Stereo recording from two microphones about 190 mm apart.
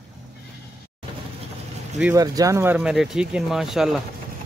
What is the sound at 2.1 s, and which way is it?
Speech, 20° right (ahead or behind).